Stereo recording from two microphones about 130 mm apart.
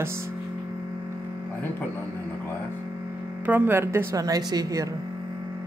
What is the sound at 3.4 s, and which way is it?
Speech, 15° right (ahead or behind).